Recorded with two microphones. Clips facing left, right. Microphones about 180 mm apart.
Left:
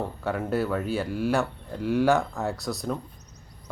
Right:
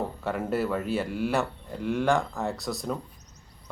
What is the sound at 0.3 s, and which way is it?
Speech, centre (ahead or behind).